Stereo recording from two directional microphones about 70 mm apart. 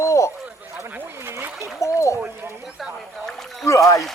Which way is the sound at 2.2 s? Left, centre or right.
Right.